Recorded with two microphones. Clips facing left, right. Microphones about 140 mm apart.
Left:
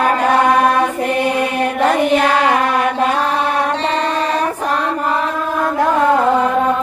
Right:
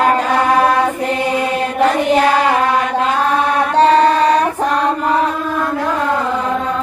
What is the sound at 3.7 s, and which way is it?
Music, 40° right (ahead or behind).